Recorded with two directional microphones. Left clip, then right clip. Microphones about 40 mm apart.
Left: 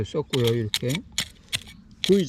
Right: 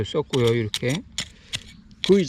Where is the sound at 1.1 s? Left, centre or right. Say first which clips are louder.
Left 2 dB; left.